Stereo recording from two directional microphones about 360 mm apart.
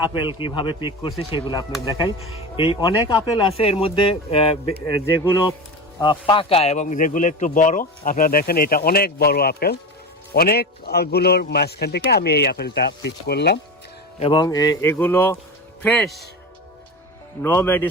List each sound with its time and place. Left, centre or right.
0.0 s a man's voice: centre
14.2 s speech: centre
17.4 s speech: centre